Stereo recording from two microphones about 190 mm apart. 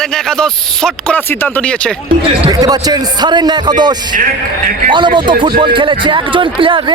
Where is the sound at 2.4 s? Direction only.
20° right (ahead or behind).